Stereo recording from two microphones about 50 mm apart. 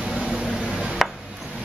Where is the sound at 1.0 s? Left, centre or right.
Centre.